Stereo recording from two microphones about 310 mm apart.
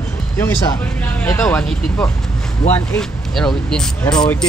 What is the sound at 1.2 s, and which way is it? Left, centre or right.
Speech, centre.